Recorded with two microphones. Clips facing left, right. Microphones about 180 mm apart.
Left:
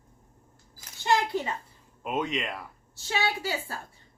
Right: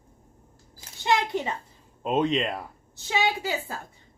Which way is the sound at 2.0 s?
30° right (ahead or behind).